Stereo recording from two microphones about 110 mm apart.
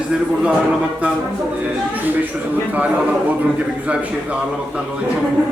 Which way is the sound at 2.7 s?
10° right (ahead or behind).